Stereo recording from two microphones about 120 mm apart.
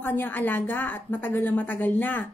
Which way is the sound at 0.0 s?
15° left (ahead or behind).